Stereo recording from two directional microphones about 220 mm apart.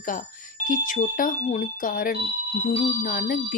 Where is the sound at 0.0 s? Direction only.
40° left (ahead or behind).